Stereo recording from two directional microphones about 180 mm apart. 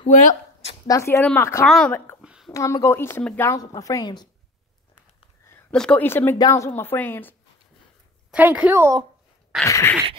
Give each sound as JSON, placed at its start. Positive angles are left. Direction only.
{"t": 0.0, "sound": "a sound", "side_deg": 40}
{"t": 0.8, "sound": "a woman's voice", "side_deg": 15}
{"t": 2.2, "sound": "a sound", "side_deg": -5}
{"t": 2.5, "sound": "a woman's voice", "side_deg": 15}
{"t": 5.5, "sound": "a woman's voice", "side_deg": 5}
{"t": 8.3, "sound": "a woman's voice", "side_deg": -10}
{"t": 9.7, "sound": "a woman's voice", "side_deg": 15}